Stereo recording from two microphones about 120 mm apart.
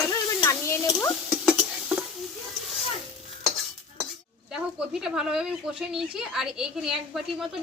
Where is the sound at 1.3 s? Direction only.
5° right (ahead or behind).